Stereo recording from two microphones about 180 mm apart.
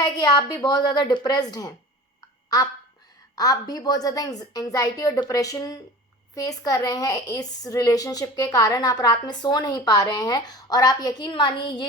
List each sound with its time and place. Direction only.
0.0 s a woman's voice: 25° left (ahead or behind)
3.3 s a woman's voice: 20° left (ahead or behind)